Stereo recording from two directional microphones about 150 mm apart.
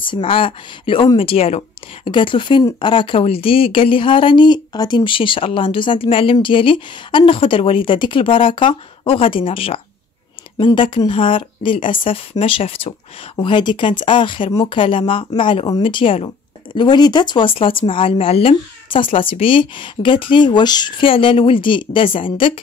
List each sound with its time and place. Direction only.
0.0 s speech: 35° left (ahead or behind)